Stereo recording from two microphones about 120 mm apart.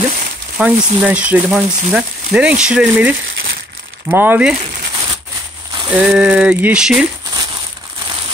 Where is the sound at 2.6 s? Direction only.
10° right (ahead or behind).